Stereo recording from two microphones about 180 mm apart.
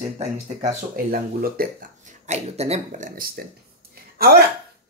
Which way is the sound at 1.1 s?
55° right (ahead or behind).